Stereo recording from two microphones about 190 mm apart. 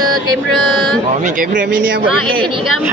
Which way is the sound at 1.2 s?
45° right (ahead or behind).